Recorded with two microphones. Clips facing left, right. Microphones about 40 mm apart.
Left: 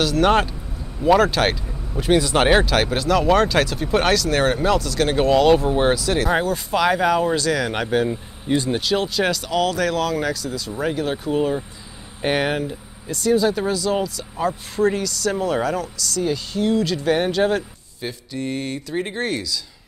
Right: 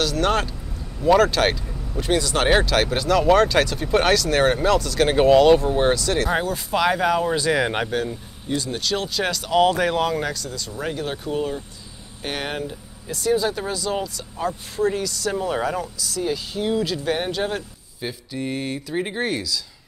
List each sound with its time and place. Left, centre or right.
0.0 s speech: centre
7.3 s speech: centre
8.1 s speech: left
8.7 s speech: centre
9.5 s speech: centre
10.2 s speech: centre
12.2 s speech: centre
12.4 s speech: centre